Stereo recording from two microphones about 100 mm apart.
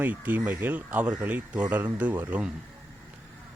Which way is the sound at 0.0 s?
15° right (ahead or behind).